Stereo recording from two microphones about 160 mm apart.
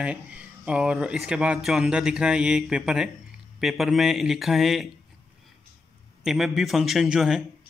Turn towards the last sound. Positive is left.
turn(degrees=-5)  # may be behind; listen again after turning